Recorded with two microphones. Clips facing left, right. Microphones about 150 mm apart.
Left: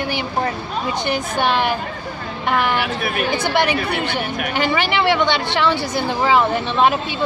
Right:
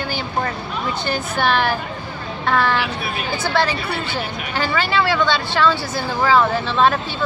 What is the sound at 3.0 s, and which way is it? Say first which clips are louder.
Speech: left 5 dB; 55° left (ahead or behind).